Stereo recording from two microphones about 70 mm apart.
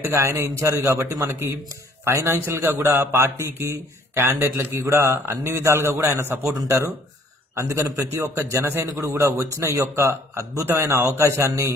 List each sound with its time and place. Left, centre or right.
0.1 s speech: right
2.2 s a man's voice: right
6.4 s speech: centre
7.5 s speech: right
10.7 s a man's voice: right
11.4 s speech: right